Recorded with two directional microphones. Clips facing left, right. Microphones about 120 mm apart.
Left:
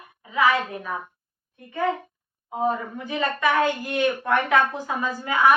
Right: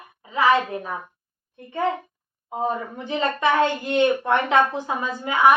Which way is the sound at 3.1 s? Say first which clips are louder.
Right 2 dB; 30° right (ahead or behind).